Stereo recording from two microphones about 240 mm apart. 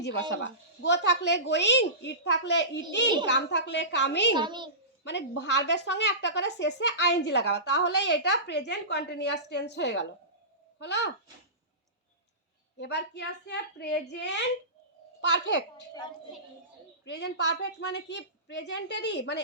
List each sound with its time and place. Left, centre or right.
0.8 s a woman's voice: left
4.4 s a child's voice: centre
5.0 s a woman's voice: left
12.8 s a woman's voice: left
17.1 s a woman's voice: left